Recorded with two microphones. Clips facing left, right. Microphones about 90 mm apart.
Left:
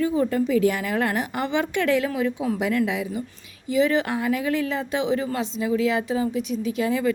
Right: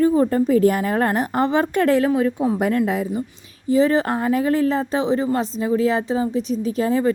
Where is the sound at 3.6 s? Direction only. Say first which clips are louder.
Right 4 dB; 35° right (ahead or behind).